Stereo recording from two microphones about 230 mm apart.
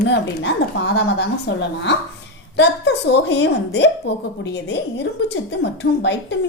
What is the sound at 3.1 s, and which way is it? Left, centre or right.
Speech, left.